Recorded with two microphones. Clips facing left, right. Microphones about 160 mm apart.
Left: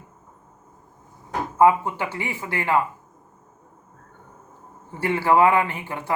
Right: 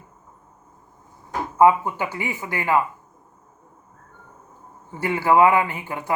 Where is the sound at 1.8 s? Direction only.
25° left (ahead or behind).